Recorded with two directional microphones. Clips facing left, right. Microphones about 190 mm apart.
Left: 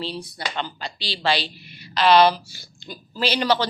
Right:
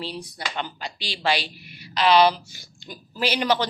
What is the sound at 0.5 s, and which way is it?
Speech, 10° right (ahead or behind).